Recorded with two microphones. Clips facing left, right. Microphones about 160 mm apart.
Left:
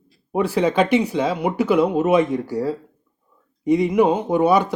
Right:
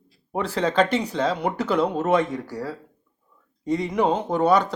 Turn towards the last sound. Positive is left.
turn(degrees=10)  # may be behind; listen again after turning